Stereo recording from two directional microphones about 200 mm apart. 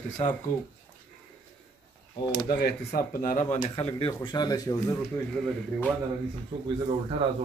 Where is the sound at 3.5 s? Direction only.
30° left (ahead or behind).